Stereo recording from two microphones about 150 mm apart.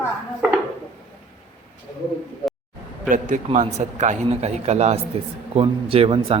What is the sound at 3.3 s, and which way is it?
A man's voice, 60° right (ahead or behind).